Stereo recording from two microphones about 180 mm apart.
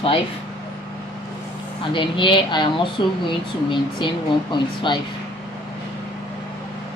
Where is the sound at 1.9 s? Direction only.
25° left (ahead or behind).